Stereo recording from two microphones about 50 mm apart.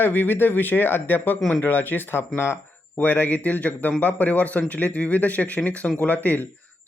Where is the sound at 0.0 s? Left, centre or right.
Left.